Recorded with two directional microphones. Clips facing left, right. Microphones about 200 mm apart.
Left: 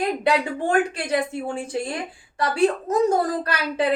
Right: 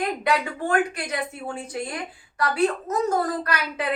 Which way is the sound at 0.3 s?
30° left (ahead or behind).